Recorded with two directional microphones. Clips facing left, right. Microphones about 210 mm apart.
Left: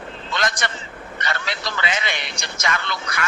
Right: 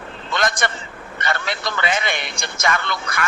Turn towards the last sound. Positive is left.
turn(degrees=-55)  # may be behind; listen again after turning